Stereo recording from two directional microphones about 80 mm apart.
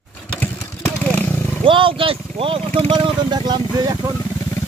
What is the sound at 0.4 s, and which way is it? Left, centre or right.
Vehicle, left.